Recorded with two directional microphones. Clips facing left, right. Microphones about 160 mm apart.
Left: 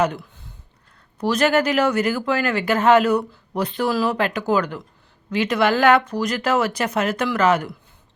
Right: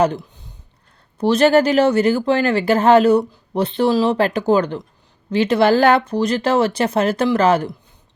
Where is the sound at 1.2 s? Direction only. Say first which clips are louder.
Right 5 dB; 30° right (ahead or behind).